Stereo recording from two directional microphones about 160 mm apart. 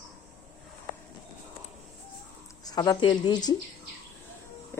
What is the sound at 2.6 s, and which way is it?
Speech, 25° left (ahead or behind).